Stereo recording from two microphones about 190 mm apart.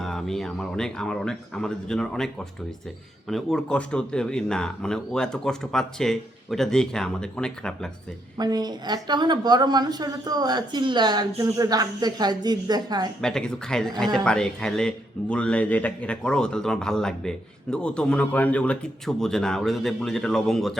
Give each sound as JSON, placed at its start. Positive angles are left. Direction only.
{"t": 0.0, "sound": "speech", "side_deg": 0}
{"t": 8.4, "sound": "a woman's voice", "side_deg": -20}
{"t": 13.2, "sound": "speech", "side_deg": 5}